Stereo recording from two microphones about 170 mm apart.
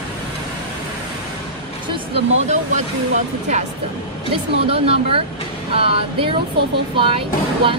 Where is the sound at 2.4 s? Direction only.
45° right (ahead or behind).